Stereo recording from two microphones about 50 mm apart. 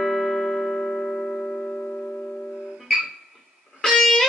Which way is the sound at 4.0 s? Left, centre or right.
Centre.